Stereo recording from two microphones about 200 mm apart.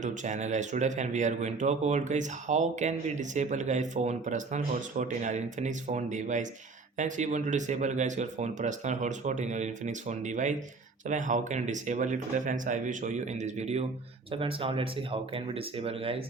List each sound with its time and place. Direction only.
0.0 s speech: 40° right (ahead or behind)